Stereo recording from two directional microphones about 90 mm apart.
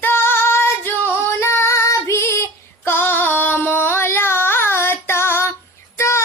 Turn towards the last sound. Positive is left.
turn(degrees=30)  # may be behind; listen again after turning